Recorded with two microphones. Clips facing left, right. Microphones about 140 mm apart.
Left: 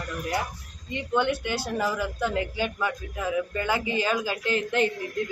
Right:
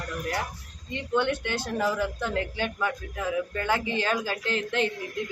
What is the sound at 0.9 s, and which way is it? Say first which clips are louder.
Speech: left 1 dB; 15° left (ahead or behind).